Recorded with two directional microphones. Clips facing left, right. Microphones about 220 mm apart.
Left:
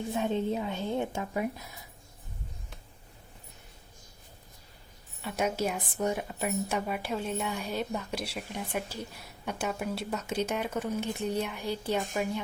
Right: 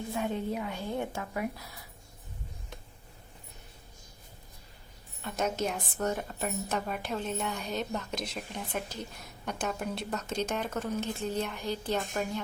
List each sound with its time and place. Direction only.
0.1 s a woman's voice: 25° left (ahead or behind)
5.2 s a woman's voice: 10° left (ahead or behind)